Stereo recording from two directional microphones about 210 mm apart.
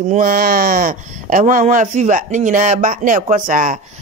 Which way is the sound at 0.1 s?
40° right (ahead or behind).